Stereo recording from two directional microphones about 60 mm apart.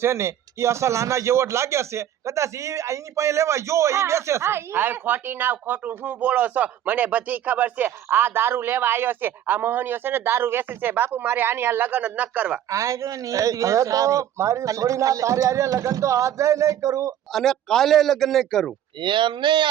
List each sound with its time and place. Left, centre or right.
0.0 s speech: right
12.7 s a man's voice: right
17.3 s speech: centre